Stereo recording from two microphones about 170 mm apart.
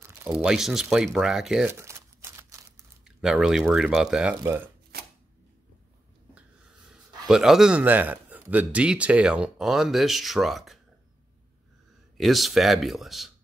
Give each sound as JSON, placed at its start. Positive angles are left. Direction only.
{"t": 0.0, "sound": "speech", "side_deg": -15}
{"t": 1.7, "sound": "a sound", "side_deg": -15}
{"t": 3.2, "sound": "speech", "side_deg": 0}
{"t": 4.4, "sound": "speech", "side_deg": -15}
{"t": 4.9, "sound": "camera", "side_deg": -65}
{"t": 7.2, "sound": "speech", "side_deg": -5}
{"t": 12.2, "sound": "speech", "side_deg": 0}